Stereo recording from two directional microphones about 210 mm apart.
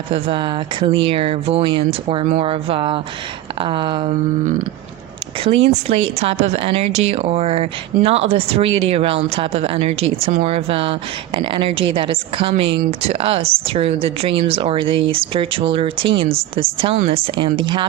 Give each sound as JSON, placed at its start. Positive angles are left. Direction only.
{"t": 0.1, "sound": "speech", "side_deg": -25}
{"t": 5.4, "sound": "speech", "side_deg": -30}